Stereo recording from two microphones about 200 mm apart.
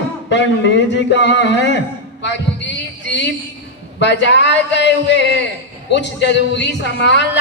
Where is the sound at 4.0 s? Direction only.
60° left (ahead or behind).